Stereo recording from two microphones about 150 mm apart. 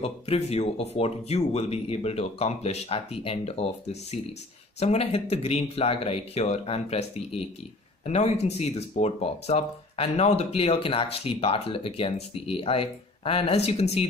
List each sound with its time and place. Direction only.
0.0 s speech: 40° left (ahead or behind)